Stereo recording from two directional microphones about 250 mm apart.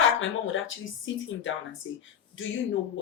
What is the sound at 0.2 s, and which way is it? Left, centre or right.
A woman's voice, left.